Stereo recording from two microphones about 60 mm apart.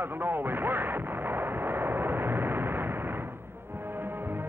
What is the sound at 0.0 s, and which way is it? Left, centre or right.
Artillery fire, right.